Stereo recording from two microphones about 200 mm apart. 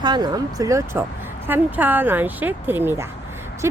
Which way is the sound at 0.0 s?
20° right (ahead or behind).